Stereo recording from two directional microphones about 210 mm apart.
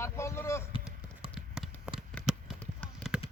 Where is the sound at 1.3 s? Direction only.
Centre (ahead or behind).